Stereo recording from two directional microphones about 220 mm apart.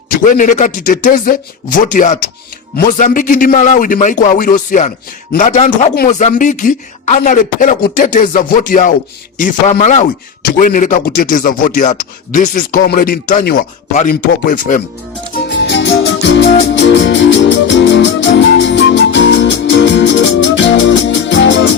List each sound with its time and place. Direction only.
0.3 s a man's voice: 35° left (ahead or behind)
15.4 s music: 55° left (ahead or behind)